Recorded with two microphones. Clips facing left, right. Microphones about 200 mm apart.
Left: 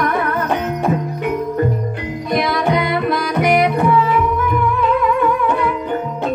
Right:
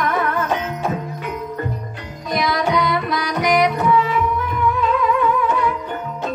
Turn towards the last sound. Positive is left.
turn(degrees=55)  # may be behind; listen again after turning